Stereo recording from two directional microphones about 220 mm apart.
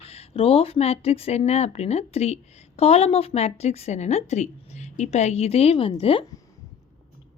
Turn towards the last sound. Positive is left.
turn(degrees=25)  # may be behind; listen again after turning